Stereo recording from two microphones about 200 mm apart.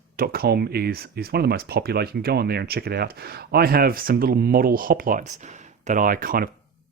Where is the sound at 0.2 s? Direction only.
50° right (ahead or behind).